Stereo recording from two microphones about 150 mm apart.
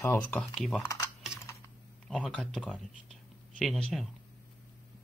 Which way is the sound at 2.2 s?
Centre (ahead or behind).